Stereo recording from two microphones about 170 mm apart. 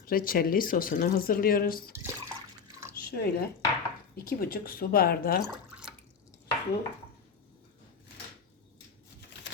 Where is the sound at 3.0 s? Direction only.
60° left (ahead or behind).